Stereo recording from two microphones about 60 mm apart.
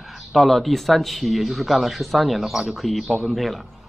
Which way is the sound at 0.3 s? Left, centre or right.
Centre.